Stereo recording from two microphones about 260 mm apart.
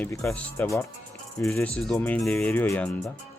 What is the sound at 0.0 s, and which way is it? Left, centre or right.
Speech, centre.